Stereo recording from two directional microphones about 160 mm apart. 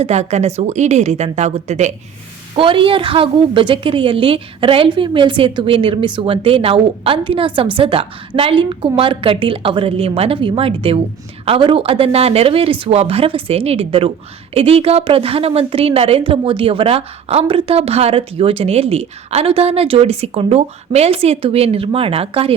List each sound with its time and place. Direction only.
0.0 s a woman's voice: 45° right (ahead or behind)
2.6 s a woman's voice: 35° right (ahead or behind)